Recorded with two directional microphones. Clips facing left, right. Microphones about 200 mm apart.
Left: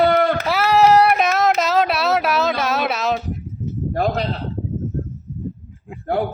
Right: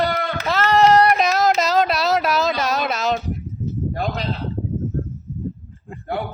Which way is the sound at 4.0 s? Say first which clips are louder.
Left 8 dB; 50° left (ahead or behind).